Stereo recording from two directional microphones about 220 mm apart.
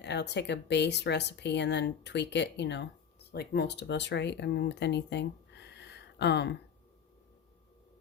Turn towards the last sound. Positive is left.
turn(degrees=50)  # may be behind; listen again after turning